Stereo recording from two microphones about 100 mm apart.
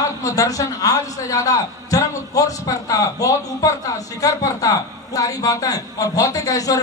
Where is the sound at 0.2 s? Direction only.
35° left (ahead or behind).